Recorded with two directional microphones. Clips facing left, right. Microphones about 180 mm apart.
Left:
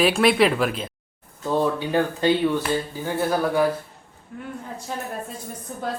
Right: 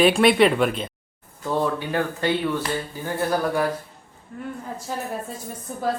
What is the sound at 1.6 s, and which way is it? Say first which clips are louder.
Speech: left 2 dB; 15° left (ahead or behind).